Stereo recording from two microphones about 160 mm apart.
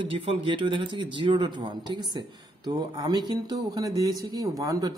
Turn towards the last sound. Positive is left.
turn(degrees=-25)  # may be behind; listen again after turning